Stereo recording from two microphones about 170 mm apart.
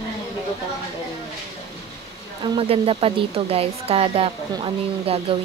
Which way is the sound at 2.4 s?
30° right (ahead or behind).